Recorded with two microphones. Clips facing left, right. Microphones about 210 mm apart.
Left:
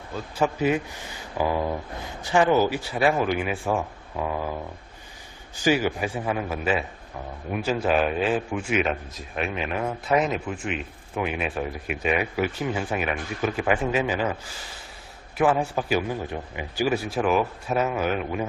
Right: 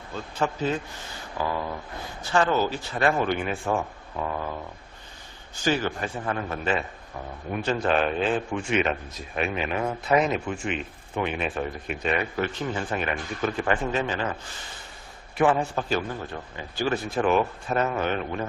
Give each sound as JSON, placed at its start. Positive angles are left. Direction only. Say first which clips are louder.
{"t": 0.3, "sound": "speech", "louder": "left 4 dB", "side_deg": 10}
{"t": 5.6, "sound": "speech", "louder": "left 3 dB", "side_deg": 10}
{"t": 15.4, "sound": "speech", "louder": "even", "side_deg": 5}